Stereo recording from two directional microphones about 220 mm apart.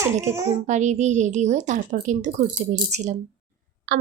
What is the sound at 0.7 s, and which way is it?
A woman's voice, 35° right (ahead or behind).